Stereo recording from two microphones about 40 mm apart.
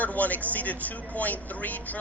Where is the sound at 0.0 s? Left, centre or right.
Left.